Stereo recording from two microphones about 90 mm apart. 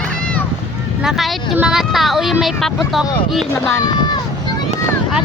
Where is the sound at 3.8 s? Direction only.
50° left (ahead or behind).